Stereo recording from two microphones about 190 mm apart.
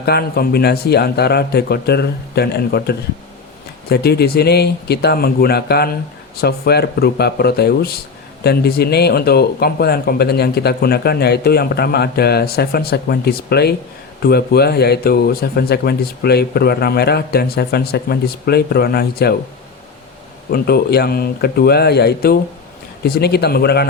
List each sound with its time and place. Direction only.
0.0 s speech: 55° left (ahead or behind)
20.5 s speech: 55° left (ahead or behind)